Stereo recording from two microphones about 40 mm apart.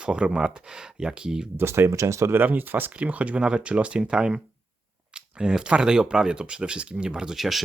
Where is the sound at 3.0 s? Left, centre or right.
Right.